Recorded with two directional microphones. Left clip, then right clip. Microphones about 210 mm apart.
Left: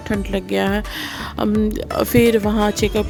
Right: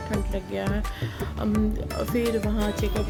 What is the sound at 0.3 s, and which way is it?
Speech, 55° left (ahead or behind).